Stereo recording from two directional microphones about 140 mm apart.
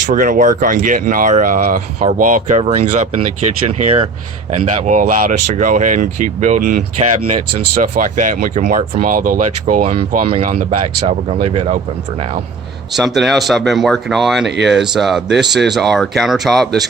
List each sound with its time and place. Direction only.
0.1 s speech: 70° right (ahead or behind)
4.9 s speech: 65° right (ahead or behind)
10.2 s speech: 45° right (ahead or behind)
11.4 s speech: 45° right (ahead or behind)
12.9 s speech: centre (ahead or behind)